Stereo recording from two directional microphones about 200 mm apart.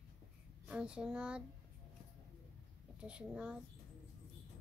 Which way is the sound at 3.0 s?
5° right (ahead or behind).